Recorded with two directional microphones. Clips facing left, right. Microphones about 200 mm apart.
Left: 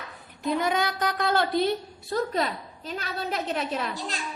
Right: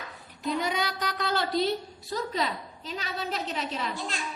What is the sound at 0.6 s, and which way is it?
A woman's voice, 50° left (ahead or behind).